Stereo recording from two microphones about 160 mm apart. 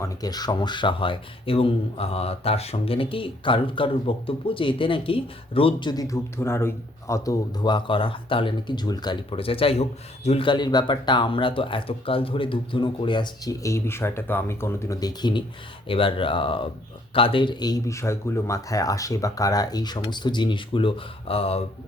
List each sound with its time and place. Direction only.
0.0 s speech: 25° left (ahead or behind)